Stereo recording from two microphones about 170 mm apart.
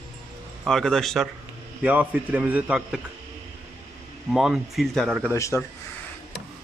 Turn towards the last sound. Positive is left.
turn(degrees=15)  # may be behind; listen again after turning